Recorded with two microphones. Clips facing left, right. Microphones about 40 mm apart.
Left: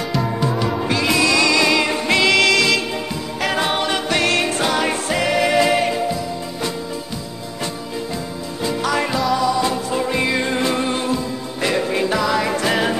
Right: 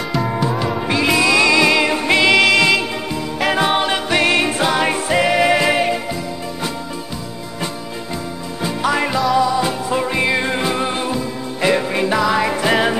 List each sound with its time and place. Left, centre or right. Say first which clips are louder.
0.1 s music: right 2 dB; centre
8.8 s music: right 3 dB; centre